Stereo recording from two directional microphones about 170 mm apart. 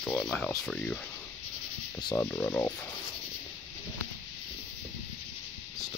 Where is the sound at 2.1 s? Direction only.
15° left (ahead or behind).